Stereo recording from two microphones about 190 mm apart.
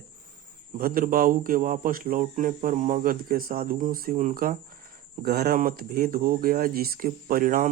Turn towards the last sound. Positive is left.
turn(degrees=-50)  # may be behind; listen again after turning